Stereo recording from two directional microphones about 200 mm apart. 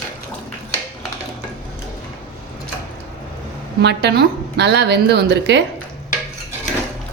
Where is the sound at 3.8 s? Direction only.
55° right (ahead or behind).